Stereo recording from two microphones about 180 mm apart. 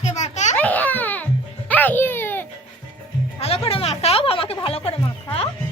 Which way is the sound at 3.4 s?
35° left (ahead or behind).